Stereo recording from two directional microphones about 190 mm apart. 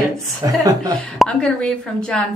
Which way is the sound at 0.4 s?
20° right (ahead or behind).